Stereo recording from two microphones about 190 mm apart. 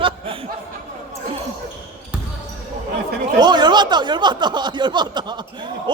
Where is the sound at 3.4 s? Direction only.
20° right (ahead or behind).